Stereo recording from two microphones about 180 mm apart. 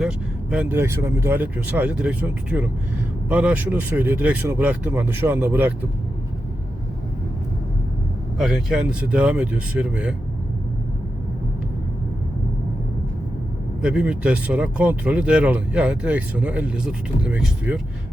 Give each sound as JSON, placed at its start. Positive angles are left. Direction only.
{"t": 0.5, "sound": "speech", "side_deg": -10}
{"t": 8.4, "sound": "speech", "side_deg": 0}
{"t": 13.8, "sound": "speech", "side_deg": -5}